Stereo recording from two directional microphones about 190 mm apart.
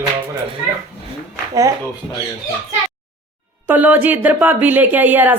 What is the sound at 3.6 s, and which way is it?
Speech, 10° right (ahead or behind).